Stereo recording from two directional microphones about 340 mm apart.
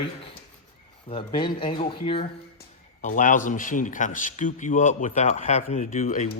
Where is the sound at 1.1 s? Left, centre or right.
Centre.